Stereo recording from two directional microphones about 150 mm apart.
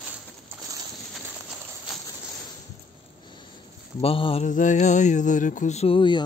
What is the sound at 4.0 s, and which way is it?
Music, 40° left (ahead or behind).